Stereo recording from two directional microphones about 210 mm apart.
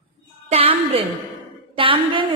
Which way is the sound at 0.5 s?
25° right (ahead or behind).